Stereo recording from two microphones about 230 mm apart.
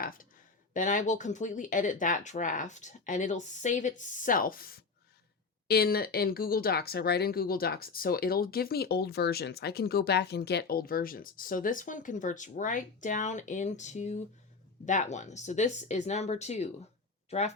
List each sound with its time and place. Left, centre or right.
0.0 s speech: left